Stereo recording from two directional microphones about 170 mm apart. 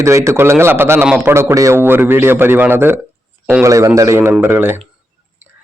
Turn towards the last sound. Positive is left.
turn(degrees=-10)  # may be behind; listen again after turning